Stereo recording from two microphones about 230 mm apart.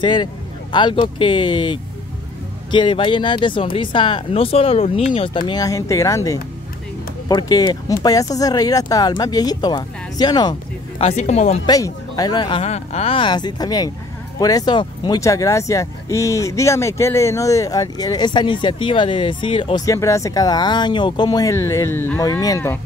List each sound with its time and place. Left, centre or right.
0.0 s speech: centre
11.0 s speech: left
11.6 s speech: centre